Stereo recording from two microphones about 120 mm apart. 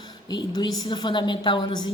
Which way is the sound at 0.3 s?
35° left (ahead or behind).